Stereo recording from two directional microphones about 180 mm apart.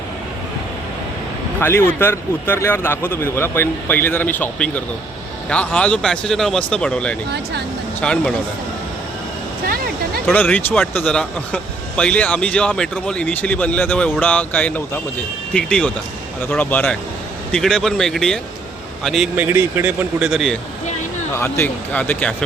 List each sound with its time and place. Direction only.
1.5 s speech: 15° left (ahead or behind)
9.6 s speech: 55° right (ahead or behind)
10.2 s speech: 10° left (ahead or behind)
21.3 s speech: 15° left (ahead or behind)